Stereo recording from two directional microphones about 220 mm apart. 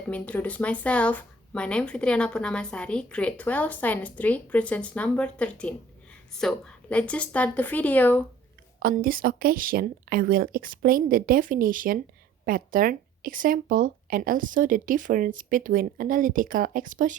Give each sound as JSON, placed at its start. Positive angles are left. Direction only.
{"t": 0.1, "sound": "a woman's voice", "side_deg": 5}
{"t": 8.8, "sound": "speech", "side_deg": -40}